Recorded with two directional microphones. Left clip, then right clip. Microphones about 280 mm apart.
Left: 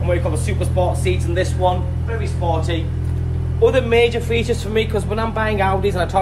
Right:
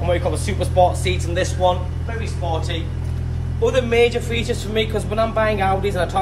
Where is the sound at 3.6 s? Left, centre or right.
Left.